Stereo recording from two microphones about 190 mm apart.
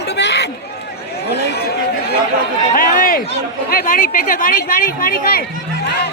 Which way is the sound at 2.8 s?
50° left (ahead or behind).